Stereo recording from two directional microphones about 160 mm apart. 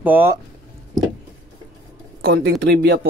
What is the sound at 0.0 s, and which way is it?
Speech, 15° right (ahead or behind).